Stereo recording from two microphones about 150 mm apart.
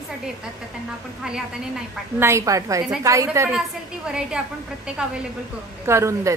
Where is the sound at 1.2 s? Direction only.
5° right (ahead or behind).